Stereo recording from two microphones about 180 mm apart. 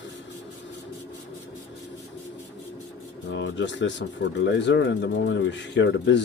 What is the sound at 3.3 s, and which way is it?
Speech, 90° left.